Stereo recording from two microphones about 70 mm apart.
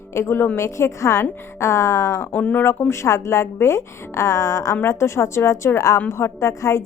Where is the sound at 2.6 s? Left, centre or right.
Left.